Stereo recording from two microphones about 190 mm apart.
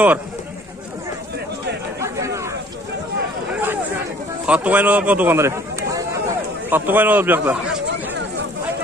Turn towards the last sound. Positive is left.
turn(degrees=-10)  # may be behind; listen again after turning